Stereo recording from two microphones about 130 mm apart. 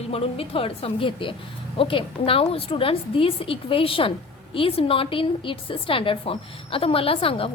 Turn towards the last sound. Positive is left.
turn(degrees=45)  # may be behind; listen again after turning